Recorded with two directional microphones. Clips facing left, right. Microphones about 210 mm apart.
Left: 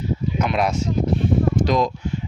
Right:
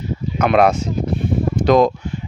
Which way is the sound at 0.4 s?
60° right (ahead or behind).